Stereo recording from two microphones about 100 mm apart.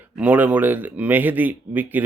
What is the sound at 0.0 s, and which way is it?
Speech, 15° right (ahead or behind).